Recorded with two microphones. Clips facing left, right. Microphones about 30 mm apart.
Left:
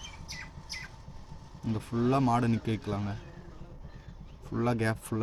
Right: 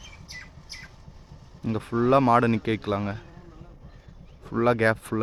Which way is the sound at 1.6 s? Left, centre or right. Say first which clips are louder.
Right 5 dB; right.